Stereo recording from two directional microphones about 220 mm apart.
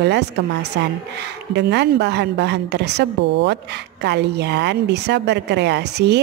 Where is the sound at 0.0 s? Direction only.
50° right (ahead or behind).